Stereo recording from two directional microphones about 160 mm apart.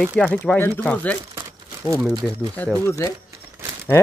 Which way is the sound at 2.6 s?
15° left (ahead or behind).